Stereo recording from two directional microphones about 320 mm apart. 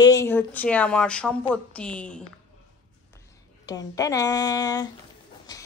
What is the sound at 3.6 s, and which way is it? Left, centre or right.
A woman's voice, centre.